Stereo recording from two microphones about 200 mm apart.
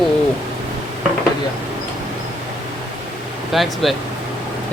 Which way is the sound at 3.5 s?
Centre (ahead or behind).